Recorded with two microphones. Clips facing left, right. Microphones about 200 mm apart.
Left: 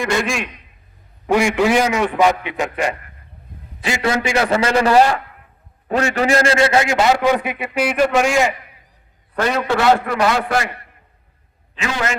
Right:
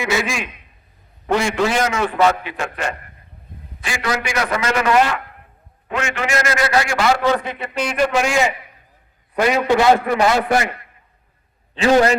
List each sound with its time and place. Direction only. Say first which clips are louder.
0.0 s a man's voice: left 1 dB; 5° right (ahead or behind)
1.3 s a man's voice: left 3 dB; 10° left (ahead or behind)
9.3 s a man's voice: right 3 dB; 10° right (ahead or behind)
11.7 s a man's voice: right 9 dB; 35° right (ahead or behind)